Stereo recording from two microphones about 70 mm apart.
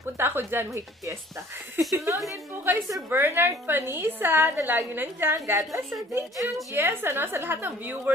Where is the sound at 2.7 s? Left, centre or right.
Right.